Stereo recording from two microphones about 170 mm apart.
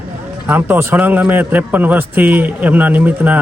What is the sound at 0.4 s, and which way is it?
A man's voice, 10° right (ahead or behind).